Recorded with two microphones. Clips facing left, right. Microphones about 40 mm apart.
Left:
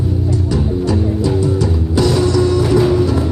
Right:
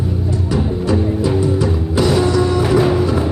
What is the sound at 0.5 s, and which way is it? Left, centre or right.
Music, centre.